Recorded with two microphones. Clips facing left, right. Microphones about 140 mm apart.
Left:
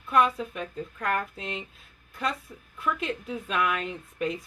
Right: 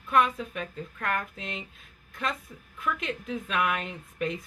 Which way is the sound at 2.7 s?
35° left (ahead or behind).